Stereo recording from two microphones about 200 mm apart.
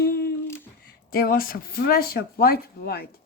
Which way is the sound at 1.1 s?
45° left (ahead or behind).